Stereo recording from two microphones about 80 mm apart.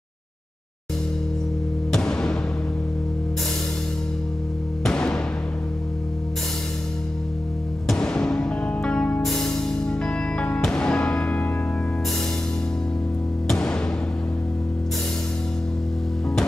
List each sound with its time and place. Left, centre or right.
1.9 s music: centre
4.8 s music: centre
7.9 s music: centre
9.2 s music: centre
13.5 s music: centre